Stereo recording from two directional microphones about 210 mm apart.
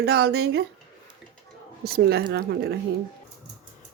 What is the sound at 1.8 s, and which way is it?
Speech, 50° right (ahead or behind).